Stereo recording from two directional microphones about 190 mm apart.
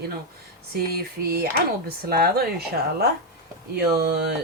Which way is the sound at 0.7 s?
55° right (ahead or behind).